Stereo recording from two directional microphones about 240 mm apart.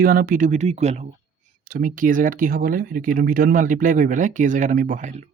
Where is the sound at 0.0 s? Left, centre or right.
Right.